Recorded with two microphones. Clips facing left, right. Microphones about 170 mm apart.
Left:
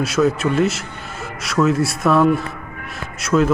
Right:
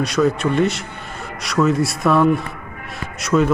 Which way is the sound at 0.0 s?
5° left (ahead or behind).